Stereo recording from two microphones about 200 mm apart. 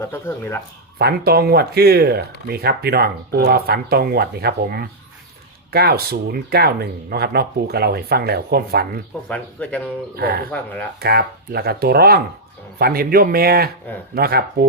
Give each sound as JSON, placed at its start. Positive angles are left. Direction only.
{"t": 0.0, "sound": "speech", "side_deg": 10}
{"t": 0.9, "sound": "speech", "side_deg": -55}
{"t": 9.3, "sound": "speech", "side_deg": 5}
{"t": 10.2, "sound": "speech", "side_deg": -50}